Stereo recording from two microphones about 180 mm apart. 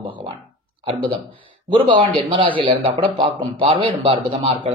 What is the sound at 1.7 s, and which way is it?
A man's voice, 25° right (ahead or behind).